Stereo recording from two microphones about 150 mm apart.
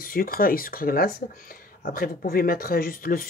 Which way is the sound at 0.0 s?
75° left (ahead or behind).